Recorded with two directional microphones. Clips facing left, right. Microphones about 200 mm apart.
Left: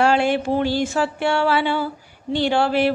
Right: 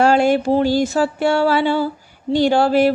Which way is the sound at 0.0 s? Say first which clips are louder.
Right 4 dB; 40° right (ahead or behind).